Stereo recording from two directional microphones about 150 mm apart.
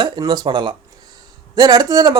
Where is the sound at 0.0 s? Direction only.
30° right (ahead or behind).